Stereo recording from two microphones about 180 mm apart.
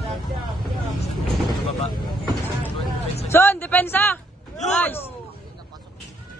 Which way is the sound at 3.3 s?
10° left (ahead or behind).